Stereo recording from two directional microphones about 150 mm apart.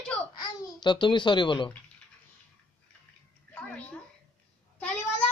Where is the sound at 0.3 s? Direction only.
30° left (ahead or behind).